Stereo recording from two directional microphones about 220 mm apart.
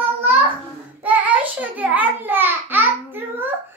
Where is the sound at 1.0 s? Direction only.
5° right (ahead or behind).